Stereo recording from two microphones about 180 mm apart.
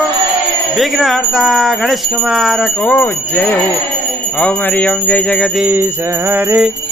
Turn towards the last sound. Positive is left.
turn(degrees=-5)  # may be behind; listen again after turning